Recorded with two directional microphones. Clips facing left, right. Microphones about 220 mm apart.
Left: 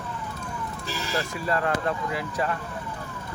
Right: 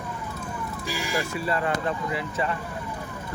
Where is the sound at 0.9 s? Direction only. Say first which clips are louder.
Right 1 dB; 10° right (ahead or behind).